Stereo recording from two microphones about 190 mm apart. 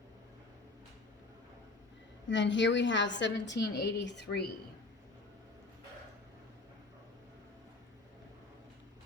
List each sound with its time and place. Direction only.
2.3 s a woman's voice: 75° left (ahead or behind)